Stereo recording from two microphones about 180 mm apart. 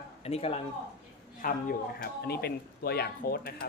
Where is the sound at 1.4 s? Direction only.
50° left (ahead or behind).